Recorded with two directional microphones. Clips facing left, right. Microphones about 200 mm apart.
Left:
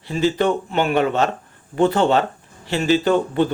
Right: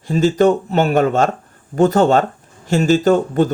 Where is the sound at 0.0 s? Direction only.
45° right (ahead or behind).